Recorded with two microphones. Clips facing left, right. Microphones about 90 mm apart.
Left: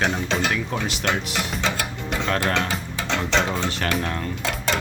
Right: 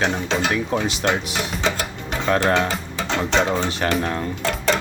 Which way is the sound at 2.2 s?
10° right (ahead or behind).